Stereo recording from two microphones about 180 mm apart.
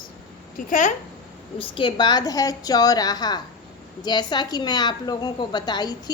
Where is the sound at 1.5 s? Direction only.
30° left (ahead or behind).